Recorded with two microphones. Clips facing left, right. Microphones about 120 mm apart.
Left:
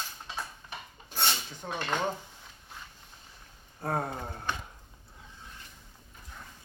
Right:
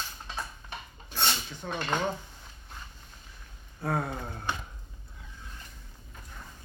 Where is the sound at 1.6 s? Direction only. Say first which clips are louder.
Right 1 dB; 45° left (ahead or behind).